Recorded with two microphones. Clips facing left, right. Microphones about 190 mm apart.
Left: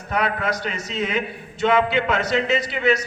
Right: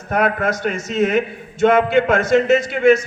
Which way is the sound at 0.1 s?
50° right (ahead or behind).